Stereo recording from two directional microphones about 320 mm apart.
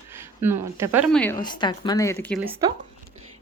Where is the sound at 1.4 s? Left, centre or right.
Centre.